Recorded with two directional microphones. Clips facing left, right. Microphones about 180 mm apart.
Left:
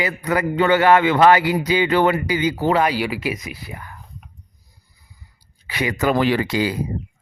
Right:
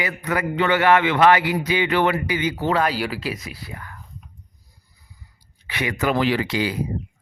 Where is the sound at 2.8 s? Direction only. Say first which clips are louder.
Left 3 dB; 10° left (ahead or behind).